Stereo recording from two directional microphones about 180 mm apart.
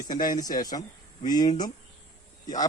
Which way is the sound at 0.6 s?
20° left (ahead or behind).